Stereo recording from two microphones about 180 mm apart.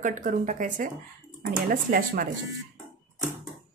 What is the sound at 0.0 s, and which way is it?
Speech, 45° right (ahead or behind).